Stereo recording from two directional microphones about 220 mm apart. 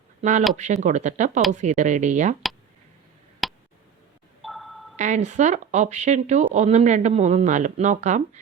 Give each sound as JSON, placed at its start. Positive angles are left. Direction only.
{"t": 0.2, "sound": "speech", "side_deg": -35}
{"t": 3.4, "sound": "a sound", "side_deg": 0}
{"t": 4.9, "sound": "speech", "side_deg": -30}